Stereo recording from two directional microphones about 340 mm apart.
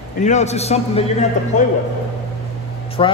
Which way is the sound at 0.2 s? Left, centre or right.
Centre.